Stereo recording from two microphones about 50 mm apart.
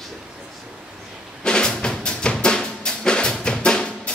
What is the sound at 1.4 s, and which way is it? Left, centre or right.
Drum, centre.